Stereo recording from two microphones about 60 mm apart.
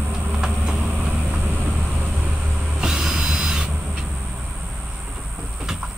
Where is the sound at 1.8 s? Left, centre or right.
Centre.